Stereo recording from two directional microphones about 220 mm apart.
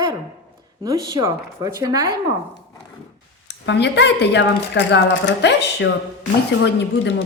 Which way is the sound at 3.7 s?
50° left (ahead or behind).